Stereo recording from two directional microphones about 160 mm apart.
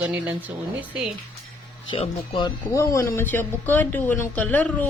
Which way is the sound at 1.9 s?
30° left (ahead or behind).